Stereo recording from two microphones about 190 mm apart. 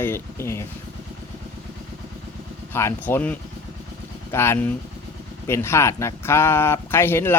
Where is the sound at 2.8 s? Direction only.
15° left (ahead or behind).